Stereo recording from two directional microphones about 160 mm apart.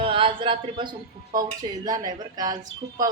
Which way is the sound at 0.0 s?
35° right (ahead or behind).